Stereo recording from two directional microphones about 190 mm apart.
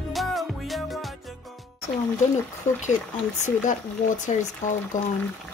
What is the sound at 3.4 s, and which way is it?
Speech, 40° left (ahead or behind).